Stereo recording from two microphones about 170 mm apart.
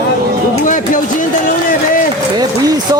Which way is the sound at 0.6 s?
50° left (ahead or behind).